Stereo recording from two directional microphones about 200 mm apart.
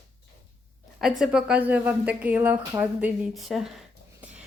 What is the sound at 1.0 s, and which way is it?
Speech, 5° right (ahead or behind).